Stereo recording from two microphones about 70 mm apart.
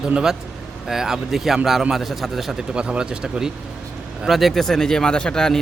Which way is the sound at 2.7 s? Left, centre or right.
Centre.